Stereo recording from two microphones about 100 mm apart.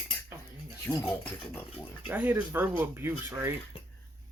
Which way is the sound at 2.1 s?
20° right (ahead or behind).